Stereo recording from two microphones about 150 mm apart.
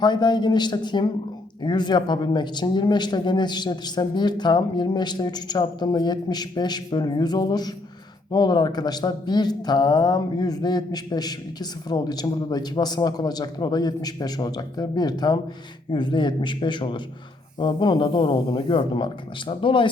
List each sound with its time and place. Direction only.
0.0 s speech: 30° left (ahead or behind)